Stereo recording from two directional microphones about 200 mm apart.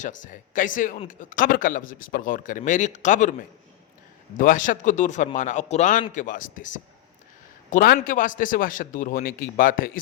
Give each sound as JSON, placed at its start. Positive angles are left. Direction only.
{"t": 0.0, "sound": "speech", "side_deg": 40}
{"t": 4.4, "sound": "a man's voice", "side_deg": 40}